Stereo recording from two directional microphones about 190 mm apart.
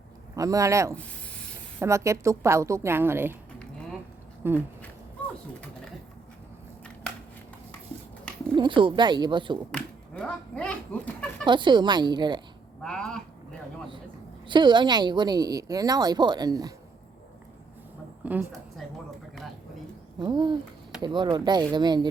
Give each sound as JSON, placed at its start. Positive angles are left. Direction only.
{"t": 0.3, "sound": "a woman's voice", "side_deg": -15}
{"t": 4.4, "sound": "a woman's voice", "side_deg": -10}
{"t": 8.5, "sound": "a woman's voice", "side_deg": -25}
{"t": 9.7, "sound": "speech", "side_deg": 5}
{"t": 11.4, "sound": "a woman's voice", "side_deg": -25}
{"t": 12.8, "sound": "speech", "side_deg": 5}
{"t": 14.4, "sound": "a woman's voice", "side_deg": -25}
{"t": 18.2, "sound": "a sound", "side_deg": -10}
{"t": 20.1, "sound": "a woman's voice", "side_deg": -25}